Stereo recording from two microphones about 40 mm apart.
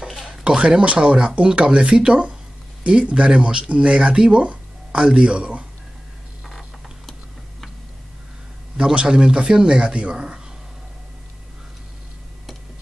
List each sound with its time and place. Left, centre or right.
0.6 s speech: right
8.9 s speech: right